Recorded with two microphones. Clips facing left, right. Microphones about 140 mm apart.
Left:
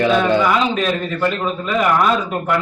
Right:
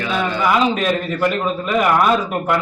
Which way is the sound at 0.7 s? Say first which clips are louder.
Even; 10° right (ahead or behind).